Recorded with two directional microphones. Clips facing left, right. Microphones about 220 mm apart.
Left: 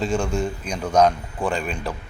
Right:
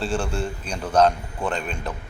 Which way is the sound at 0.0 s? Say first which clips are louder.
Left 3 dB; 10° left (ahead or behind).